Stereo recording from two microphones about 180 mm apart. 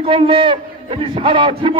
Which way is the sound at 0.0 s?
30° right (ahead or behind).